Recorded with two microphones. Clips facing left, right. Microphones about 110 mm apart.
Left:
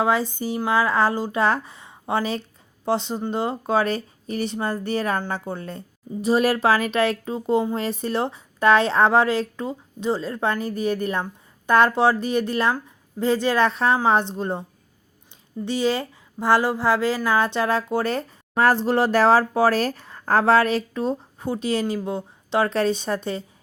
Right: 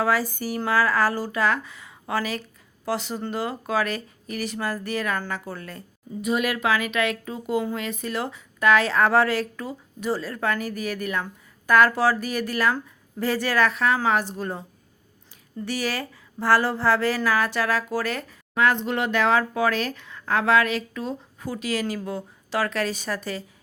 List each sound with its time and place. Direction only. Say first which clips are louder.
0.0 s a woman's voice: left 2 dB; 20° left (ahead or behind)
15.6 s a woman's voice: left 5 dB; 20° left (ahead or behind)